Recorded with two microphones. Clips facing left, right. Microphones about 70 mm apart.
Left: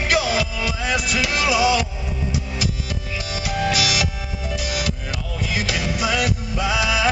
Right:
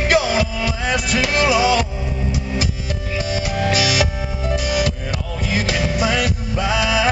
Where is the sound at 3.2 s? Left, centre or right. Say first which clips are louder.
Right 3 dB; right.